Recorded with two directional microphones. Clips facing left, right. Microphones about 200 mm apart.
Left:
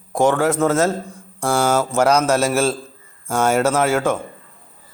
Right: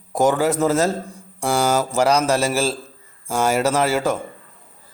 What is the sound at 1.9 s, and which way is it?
A man's voice, centre (ahead or behind).